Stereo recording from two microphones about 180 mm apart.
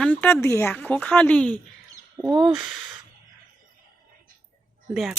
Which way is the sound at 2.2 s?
25° right (ahead or behind).